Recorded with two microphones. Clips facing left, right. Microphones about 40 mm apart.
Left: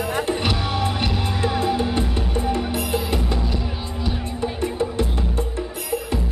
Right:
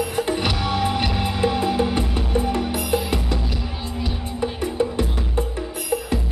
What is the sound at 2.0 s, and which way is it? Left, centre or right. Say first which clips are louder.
Music: right 1 dB; centre.